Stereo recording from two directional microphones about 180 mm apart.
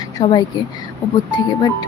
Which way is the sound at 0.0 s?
20° left (ahead or behind).